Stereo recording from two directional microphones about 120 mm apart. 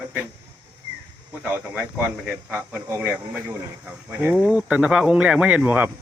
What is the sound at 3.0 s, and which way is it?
Speech, 10° right (ahead or behind).